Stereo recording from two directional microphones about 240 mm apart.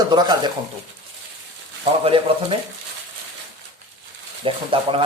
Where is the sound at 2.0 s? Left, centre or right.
Right.